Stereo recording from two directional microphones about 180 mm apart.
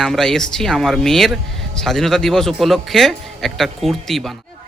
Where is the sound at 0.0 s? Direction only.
Centre (ahead or behind).